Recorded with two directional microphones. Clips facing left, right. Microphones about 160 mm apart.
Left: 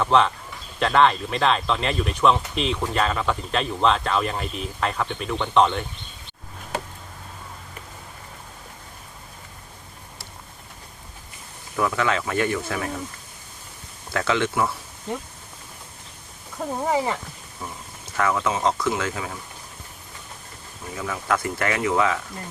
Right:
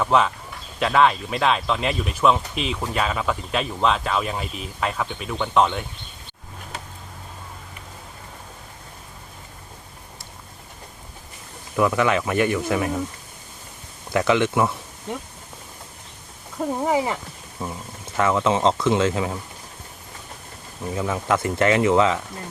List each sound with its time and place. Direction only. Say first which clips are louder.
0.0 s speech: even; 5° right (ahead or behind)
11.8 s speech: right 4 dB; 20° right (ahead or behind)
14.1 s speech: right 4 dB; 15° right (ahead or behind)
16.7 s speech: right 1 dB; 10° right (ahead or behind)
17.6 s speech: right 5 dB; 25° right (ahead or behind)
20.9 s speech: right 3 dB; 25° right (ahead or behind)